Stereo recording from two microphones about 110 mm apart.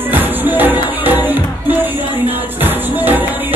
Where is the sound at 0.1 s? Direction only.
15° right (ahead or behind).